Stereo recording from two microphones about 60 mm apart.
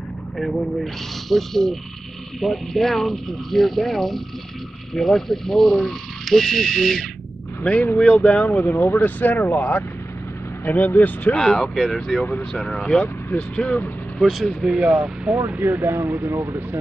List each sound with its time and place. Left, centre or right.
0.4 s speech: centre
7.6 s speech: left
8.5 s speech: left
11.3 s speech: centre
13.4 s speech: left
14.2 s speech: centre
15.7 s speech: right